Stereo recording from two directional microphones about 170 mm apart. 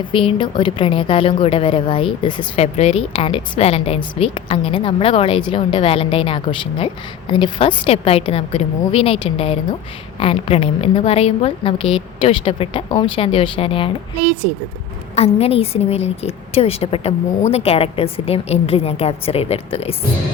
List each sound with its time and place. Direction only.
0.0 s a woman's voice: 30° left (ahead or behind)